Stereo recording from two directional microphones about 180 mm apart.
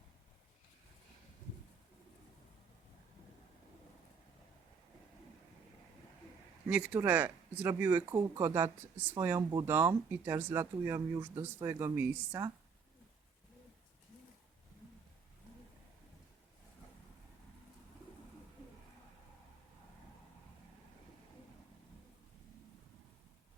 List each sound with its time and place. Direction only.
6.7 s speech: 5° right (ahead or behind)